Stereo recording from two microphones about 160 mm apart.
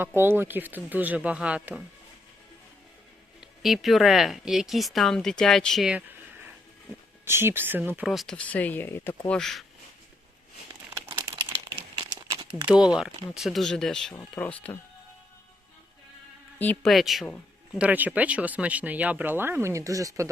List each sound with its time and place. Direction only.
0.0 s speech: 15° right (ahead or behind)
3.4 s speech: centre (ahead or behind)
7.3 s speech: 15° right (ahead or behind); by 9.6 s 5° left (ahead or behind)
11.1 s a sound: 15° right (ahead or behind)
11.6 s crumpling: 30° right (ahead or behind)
12.6 s speech: 5° right (ahead or behind)
16.6 s speech: 10° left (ahead or behind)
16.9 s speech: centre (ahead or behind); by 20.3 s 20° right (ahead or behind)